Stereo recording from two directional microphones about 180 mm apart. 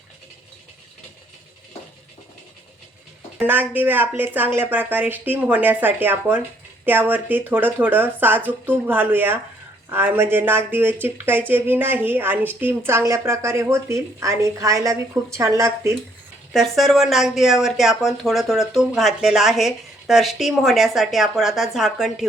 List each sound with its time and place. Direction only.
3.3 s speech: 10° right (ahead or behind)
16.7 s speech: centre (ahead or behind)